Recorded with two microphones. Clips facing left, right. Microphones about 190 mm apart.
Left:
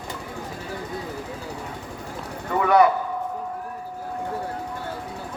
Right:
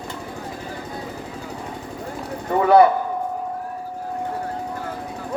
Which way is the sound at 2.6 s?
30° right (ahead or behind).